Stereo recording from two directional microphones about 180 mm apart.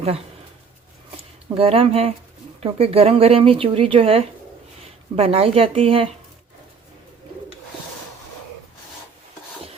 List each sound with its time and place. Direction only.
1.1 s speech: 30° right (ahead or behind)